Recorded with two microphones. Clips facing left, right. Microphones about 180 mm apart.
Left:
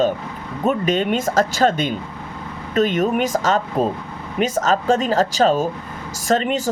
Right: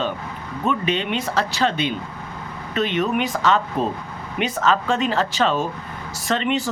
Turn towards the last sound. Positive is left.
turn(degrees=40)  # may be behind; listen again after turning